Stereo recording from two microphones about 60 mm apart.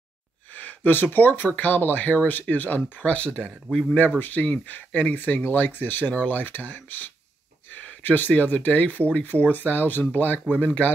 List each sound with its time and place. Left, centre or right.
0.5 s speech: left